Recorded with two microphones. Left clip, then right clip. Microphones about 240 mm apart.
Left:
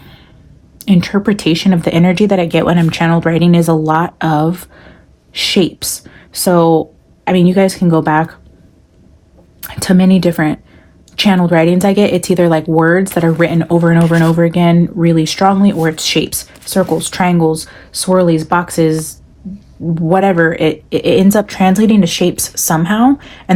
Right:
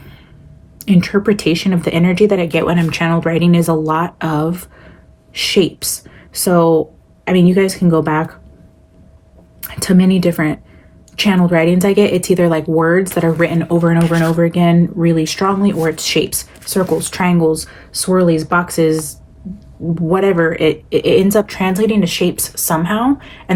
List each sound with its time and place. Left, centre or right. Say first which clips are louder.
0.8 s speech: even; left
9.6 s speech: left 2 dB; left